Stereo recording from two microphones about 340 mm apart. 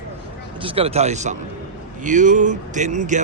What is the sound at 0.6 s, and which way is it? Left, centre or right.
Speech, centre.